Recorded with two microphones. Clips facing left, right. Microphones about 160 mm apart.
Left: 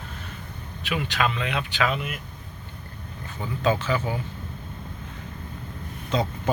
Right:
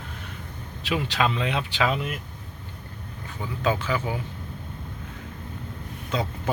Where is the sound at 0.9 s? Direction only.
30° right (ahead or behind).